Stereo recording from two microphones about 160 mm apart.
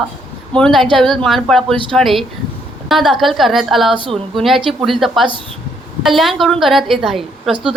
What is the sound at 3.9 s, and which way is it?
Speech, 30° right (ahead or behind).